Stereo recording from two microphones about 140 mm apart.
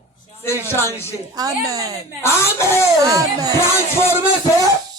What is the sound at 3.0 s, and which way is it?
Speech, 25° right (ahead or behind).